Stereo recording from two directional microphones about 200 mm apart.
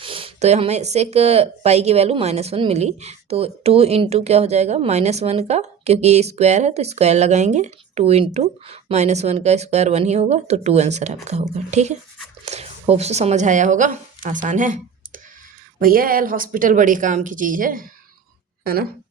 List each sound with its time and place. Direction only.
0.0 s speech: 25° right (ahead or behind)
12.5 s a sound: 35° right (ahead or behind)
12.8 s speech: 30° right (ahead or behind); by 18.9 s 50° right (ahead or behind)